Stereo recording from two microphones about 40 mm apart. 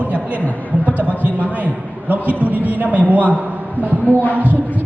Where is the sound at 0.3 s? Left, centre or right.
Left.